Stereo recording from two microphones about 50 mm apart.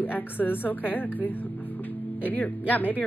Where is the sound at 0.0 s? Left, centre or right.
Left.